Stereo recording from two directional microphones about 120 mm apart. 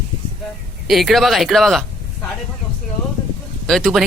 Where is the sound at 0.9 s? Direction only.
Centre (ahead or behind).